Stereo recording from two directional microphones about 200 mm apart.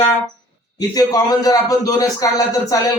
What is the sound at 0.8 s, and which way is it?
Speech, 20° left (ahead or behind).